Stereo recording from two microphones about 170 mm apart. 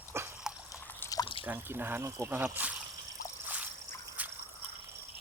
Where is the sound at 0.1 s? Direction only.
15° right (ahead or behind).